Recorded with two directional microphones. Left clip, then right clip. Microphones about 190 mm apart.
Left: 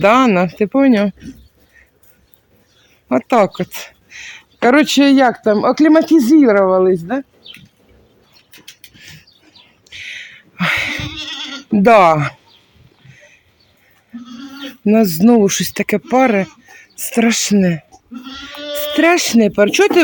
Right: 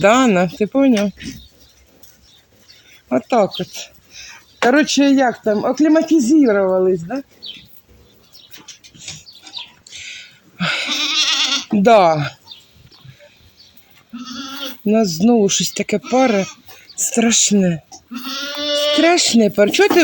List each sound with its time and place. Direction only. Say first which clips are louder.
0.0 s speech: left 2 dB; 5° left (ahead or behind)
3.1 s speech: left 3 dB; 15° left (ahead or behind)
9.9 s goat: left 7 dB; 10° left (ahead or behind)
11.8 s speech: left 3 dB; 20° left (ahead or behind)
14.8 s speech: left 3 dB; 20° left (ahead or behind)
18.6 s sheep: right 5 dB; 20° right (ahead or behind)
18.9 s speech: left 3 dB; 5° left (ahead or behind)